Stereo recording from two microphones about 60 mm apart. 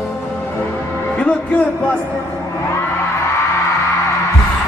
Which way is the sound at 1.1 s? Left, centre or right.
Centre.